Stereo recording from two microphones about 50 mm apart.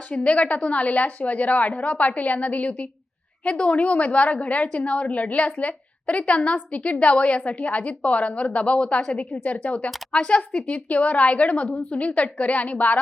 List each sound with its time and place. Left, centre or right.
0.1 s a woman's voice: left